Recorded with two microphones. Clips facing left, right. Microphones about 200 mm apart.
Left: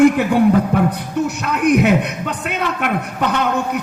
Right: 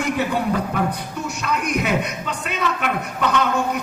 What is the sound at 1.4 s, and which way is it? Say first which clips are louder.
A man's voice: left 7 dB; 60° left (ahead or behind).